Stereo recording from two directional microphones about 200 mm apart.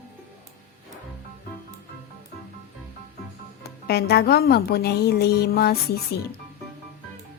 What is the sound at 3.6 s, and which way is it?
A woman's voice, 50° left (ahead or behind).